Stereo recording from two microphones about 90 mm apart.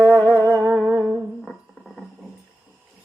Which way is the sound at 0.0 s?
15° left (ahead or behind).